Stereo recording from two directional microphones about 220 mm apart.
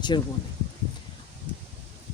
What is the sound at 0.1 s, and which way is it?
Speech, 20° left (ahead or behind).